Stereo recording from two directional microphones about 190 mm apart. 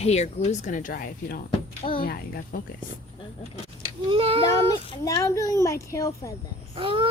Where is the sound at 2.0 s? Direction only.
50° left (ahead or behind).